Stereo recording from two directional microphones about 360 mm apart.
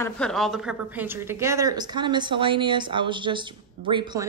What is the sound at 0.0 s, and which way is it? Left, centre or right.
Speech, centre.